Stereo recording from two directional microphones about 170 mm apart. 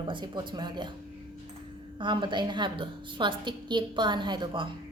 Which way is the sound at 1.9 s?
30° right (ahead or behind).